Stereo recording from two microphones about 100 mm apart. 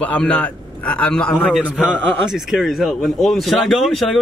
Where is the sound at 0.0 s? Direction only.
10° left (ahead or behind).